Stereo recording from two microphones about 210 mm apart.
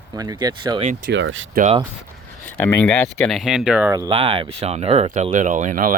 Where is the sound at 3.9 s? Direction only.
20° right (ahead or behind); by 5.9 s 40° right (ahead or behind).